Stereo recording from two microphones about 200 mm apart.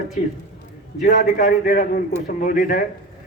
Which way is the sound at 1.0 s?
40° left (ahead or behind).